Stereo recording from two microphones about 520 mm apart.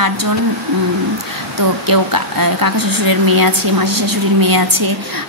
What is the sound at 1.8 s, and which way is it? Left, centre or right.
A woman's voice, right.